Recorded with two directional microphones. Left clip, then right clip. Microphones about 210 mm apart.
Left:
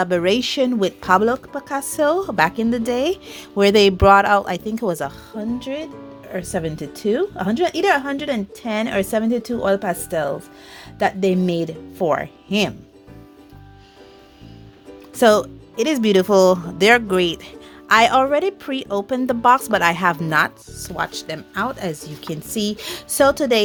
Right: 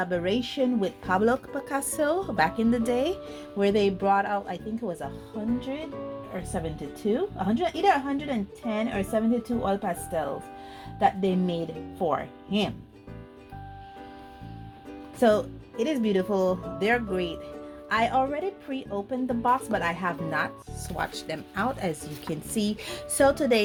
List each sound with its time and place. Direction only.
0.0 s a woman's voice: 40° left (ahead or behind)
1.2 s a woman's voice: 20° left (ahead or behind); by 12.7 s 45° left (ahead or behind)
15.2 s a woman's voice: 40° left (ahead or behind)